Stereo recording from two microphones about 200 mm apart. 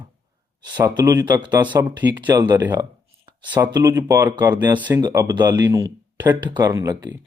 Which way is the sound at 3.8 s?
15° right (ahead or behind).